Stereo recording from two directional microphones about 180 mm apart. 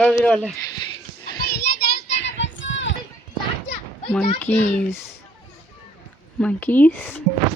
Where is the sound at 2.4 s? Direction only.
90° left.